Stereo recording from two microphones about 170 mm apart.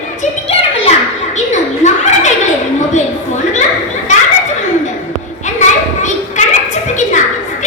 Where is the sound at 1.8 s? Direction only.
45° left (ahead or behind).